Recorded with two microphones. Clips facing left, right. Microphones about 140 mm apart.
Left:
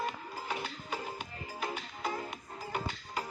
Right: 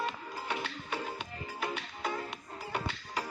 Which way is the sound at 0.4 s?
70° right (ahead or behind).